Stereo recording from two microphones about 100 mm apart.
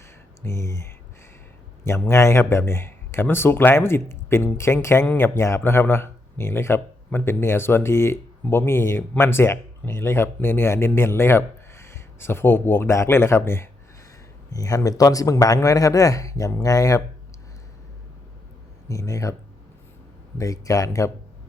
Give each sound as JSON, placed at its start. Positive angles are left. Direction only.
{"t": 0.4, "sound": "speech", "side_deg": 30}
{"t": 14.5, "sound": "speech", "side_deg": 35}
{"t": 18.9, "sound": "speech", "side_deg": 30}
{"t": 20.4, "sound": "speech", "side_deg": 35}